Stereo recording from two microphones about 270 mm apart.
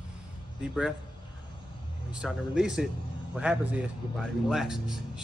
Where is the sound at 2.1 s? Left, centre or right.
Centre.